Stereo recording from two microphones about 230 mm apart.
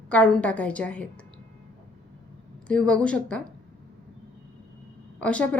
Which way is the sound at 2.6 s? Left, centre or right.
Centre.